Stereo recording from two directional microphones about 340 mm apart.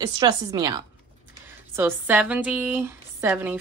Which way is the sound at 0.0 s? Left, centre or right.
Centre.